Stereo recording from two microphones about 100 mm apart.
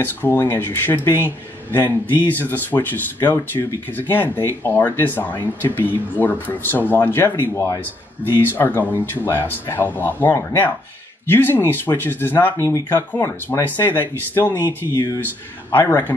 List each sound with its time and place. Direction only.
0.0 s speech: 20° left (ahead or behind)
8.2 s speech: 20° left (ahead or behind)
12.6 s speech: 35° left (ahead or behind)
15.8 s speech: 35° left (ahead or behind)